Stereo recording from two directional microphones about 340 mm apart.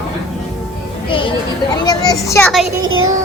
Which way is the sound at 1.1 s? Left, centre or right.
Centre.